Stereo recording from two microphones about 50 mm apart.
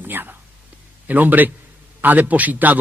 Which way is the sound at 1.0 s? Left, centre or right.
Right.